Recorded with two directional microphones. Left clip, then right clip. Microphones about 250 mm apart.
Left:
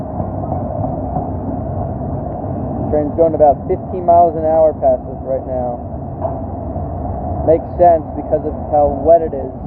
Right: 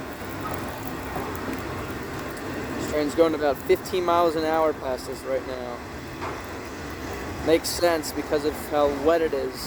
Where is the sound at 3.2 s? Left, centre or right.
Right.